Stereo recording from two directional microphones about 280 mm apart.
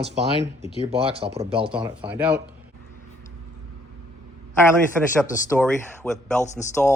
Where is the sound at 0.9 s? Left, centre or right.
Centre.